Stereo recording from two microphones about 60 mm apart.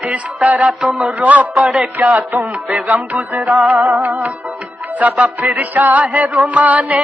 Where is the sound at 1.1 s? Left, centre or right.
Right.